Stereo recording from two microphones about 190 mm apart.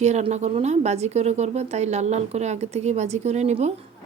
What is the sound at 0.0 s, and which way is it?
A woman's voice, 35° right (ahead or behind).